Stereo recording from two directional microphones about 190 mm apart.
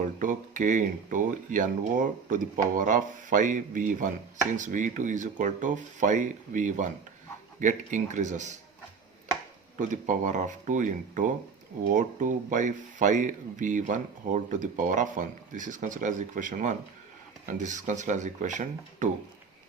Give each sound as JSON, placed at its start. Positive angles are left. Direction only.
{"t": 0.2, "sound": "speech", "side_deg": -45}
{"t": 9.7, "sound": "speech", "side_deg": -40}